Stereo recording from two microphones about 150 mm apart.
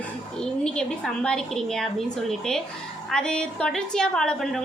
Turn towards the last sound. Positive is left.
turn(degrees=5)  # may be behind; listen again after turning